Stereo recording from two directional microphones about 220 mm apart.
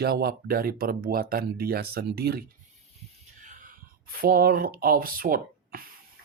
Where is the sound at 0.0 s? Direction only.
45° right (ahead or behind).